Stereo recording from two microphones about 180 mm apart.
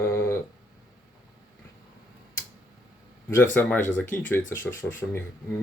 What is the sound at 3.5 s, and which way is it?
Speech, 10° left (ahead or behind).